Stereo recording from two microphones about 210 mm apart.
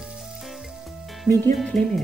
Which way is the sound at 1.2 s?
10° left (ahead or behind).